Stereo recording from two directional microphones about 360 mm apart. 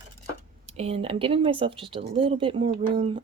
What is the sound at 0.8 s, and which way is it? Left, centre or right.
Speech, centre.